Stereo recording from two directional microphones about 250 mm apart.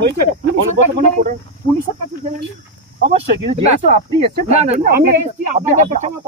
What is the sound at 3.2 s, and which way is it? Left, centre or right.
Speech, right.